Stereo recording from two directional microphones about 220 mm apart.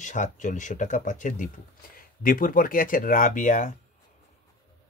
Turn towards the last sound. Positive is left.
turn(degrees=35)  # may be behind; listen again after turning